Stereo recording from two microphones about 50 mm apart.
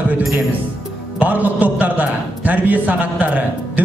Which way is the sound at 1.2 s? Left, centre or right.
Right.